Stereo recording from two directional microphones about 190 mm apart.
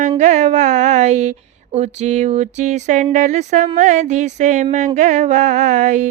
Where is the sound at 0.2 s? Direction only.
40° right (ahead or behind).